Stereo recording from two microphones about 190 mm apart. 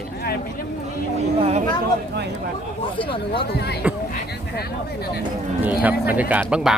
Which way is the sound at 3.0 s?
25° left (ahead or behind).